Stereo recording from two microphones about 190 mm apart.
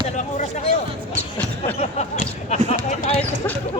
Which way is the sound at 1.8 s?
35° left (ahead or behind).